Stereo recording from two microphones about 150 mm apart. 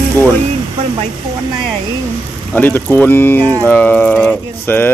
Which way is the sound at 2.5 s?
10° left (ahead or behind).